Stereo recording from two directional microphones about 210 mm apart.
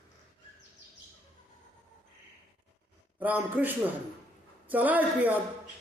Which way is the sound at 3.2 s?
10° right (ahead or behind).